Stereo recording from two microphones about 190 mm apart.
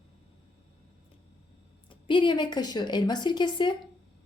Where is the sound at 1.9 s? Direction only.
25° left (ahead or behind).